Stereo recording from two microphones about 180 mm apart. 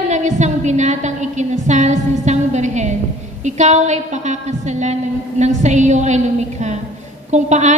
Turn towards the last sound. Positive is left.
turn(degrees=-40)  # may be behind; listen again after turning